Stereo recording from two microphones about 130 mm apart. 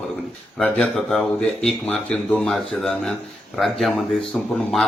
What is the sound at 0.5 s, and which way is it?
A man's voice, 5° left (ahead or behind).